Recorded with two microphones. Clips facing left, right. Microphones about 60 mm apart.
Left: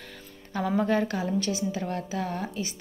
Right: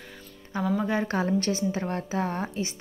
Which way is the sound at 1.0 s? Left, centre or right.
Right.